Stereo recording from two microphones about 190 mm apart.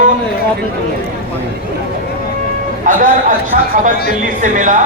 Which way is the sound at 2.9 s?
45° right (ahead or behind).